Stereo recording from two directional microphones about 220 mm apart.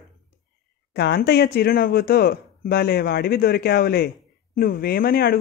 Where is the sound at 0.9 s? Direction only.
50° left (ahead or behind).